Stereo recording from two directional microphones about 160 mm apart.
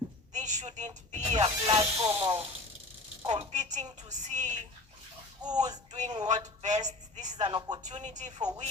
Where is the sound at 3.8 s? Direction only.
25° right (ahead or behind).